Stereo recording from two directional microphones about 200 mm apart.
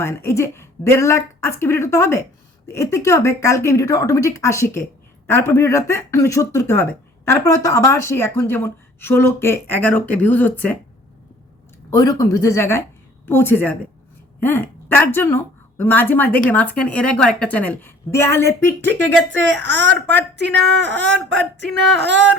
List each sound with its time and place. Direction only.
0.0 s a woman's voice: 15° left (ahead or behind)
11.9 s a woman's voice: 15° left (ahead or behind)
19.3 s a woman's voice: 65° right (ahead or behind)
21.9 s a woman's voice: 60° right (ahead or behind)